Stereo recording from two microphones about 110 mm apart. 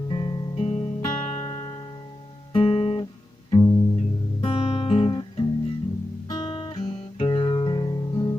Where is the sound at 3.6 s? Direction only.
30° left (ahead or behind).